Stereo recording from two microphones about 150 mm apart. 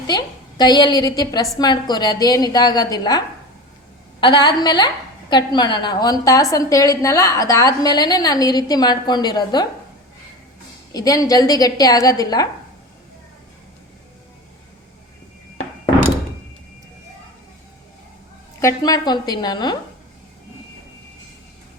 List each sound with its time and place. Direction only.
0.1 s a woman's voice: 30° left (ahead or behind)
10.9 s a woman's voice: 25° left (ahead or behind)
18.6 s a woman's voice: 25° left (ahead or behind)